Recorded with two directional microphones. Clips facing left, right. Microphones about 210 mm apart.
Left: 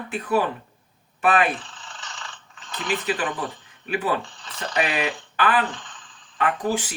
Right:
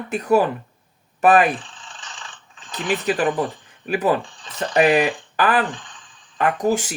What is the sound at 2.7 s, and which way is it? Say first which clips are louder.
Speech: right 4 dB; 45° right (ahead or behind).